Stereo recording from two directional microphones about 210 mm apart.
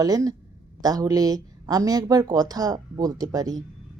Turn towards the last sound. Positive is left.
turn(degrees=-15)  # may be behind; listen again after turning